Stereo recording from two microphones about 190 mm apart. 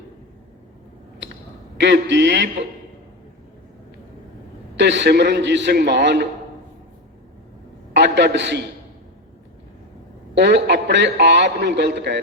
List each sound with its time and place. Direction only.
1.8 s mantra: 65° right (ahead or behind)
4.8 s a man's voice: 70° right (ahead or behind)
7.9 s a man's voice: 65° right (ahead or behind)
10.3 s a man's voice: 65° right (ahead or behind)